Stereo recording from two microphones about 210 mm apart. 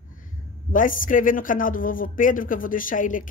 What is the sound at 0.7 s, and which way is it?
Speech, 40° left (ahead or behind).